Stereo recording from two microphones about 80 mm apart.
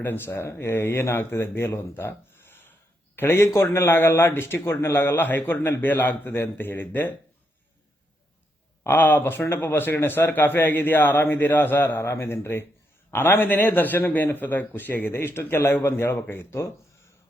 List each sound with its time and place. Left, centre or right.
0.0 s a man's voice: left
8.8 s a man's voice: left